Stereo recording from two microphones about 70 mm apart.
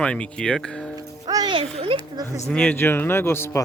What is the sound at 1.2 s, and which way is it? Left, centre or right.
Music, right.